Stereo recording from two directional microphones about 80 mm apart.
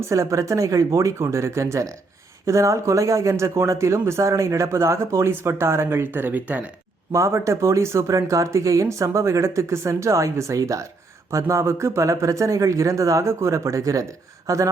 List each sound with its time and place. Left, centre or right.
0.1 s speech: right
7.1 s speech: right